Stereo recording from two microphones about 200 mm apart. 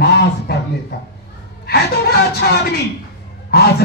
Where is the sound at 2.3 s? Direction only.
50° left (ahead or behind).